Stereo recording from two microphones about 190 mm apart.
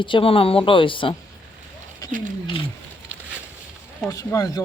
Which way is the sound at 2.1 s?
45° right (ahead or behind).